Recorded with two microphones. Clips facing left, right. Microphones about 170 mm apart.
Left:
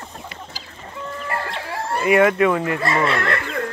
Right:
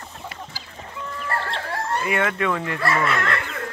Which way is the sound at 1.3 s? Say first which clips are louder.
Right 1 dB; 10° left (ahead or behind).